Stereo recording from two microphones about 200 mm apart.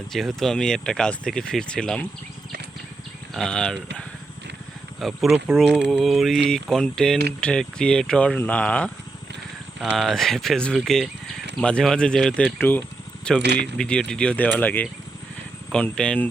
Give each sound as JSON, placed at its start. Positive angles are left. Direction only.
{"t": 0.1, "sound": "speech", "side_deg": 0}
{"t": 3.3, "sound": "speech", "side_deg": 5}
{"t": 4.9, "sound": "speech", "side_deg": 0}
{"t": 13.4, "sound": "speech", "side_deg": -55}
{"t": 13.7, "sound": "speech", "side_deg": 5}